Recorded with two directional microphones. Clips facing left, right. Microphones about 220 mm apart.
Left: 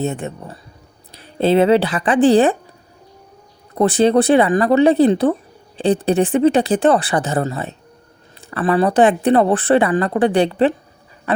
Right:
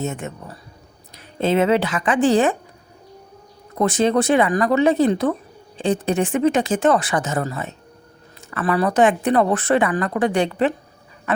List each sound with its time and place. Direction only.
0.0 s speech: 35° left (ahead or behind)
3.8 s speech: 35° left (ahead or behind)